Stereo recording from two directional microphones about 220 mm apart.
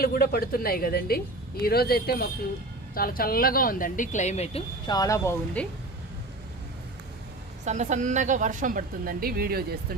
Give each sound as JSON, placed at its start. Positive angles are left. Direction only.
{"t": 0.0, "sound": "a woman's voice", "side_deg": 45}
{"t": 4.9, "sound": "speech", "side_deg": 15}
{"t": 7.6, "sound": "a woman's voice", "side_deg": -30}